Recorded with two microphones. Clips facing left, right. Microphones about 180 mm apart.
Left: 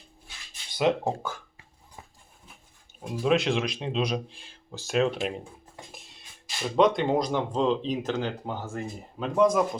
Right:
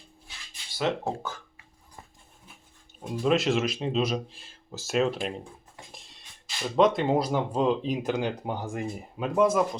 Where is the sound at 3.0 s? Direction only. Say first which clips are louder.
Even; centre (ahead or behind).